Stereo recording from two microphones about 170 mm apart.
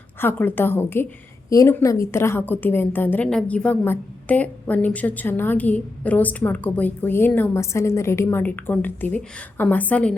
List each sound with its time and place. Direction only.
0.2 s a woman's voice: 10° left (ahead or behind)